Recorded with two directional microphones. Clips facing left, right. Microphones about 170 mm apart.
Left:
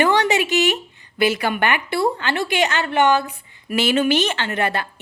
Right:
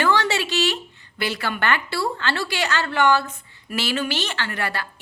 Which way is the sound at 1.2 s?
15° left (ahead or behind).